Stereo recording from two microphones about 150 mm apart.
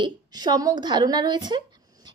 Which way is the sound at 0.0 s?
25° right (ahead or behind).